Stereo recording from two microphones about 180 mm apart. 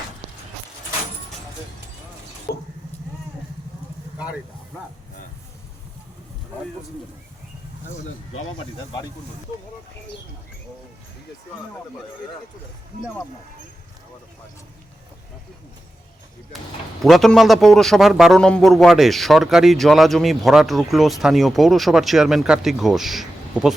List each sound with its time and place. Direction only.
8.3 s speech: 30° left (ahead or behind)
17.0 s a man's voice: centre (ahead or behind)